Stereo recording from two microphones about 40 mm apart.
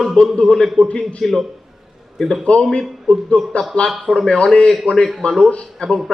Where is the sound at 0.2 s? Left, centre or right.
Left.